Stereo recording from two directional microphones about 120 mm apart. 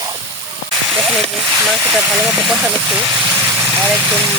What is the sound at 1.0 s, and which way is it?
Speech, 5° right (ahead or behind).